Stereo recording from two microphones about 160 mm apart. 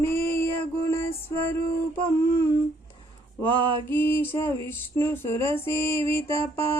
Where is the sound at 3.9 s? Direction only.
15° left (ahead or behind).